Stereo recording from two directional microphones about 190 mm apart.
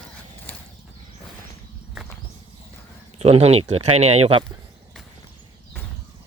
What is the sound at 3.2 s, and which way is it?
Speech, 35° right (ahead or behind).